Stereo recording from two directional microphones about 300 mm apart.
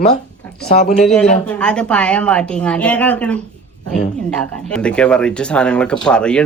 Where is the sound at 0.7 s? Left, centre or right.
Left.